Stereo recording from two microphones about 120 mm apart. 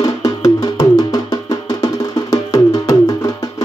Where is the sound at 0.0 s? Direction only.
30° left (ahead or behind).